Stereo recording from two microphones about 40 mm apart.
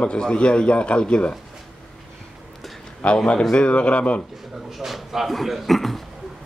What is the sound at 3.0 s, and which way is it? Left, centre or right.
A man's voice, left.